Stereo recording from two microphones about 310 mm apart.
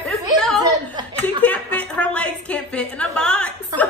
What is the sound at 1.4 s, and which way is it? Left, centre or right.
A woman's voice, centre.